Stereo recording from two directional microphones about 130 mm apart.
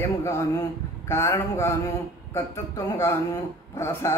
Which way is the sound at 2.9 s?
25° left (ahead or behind).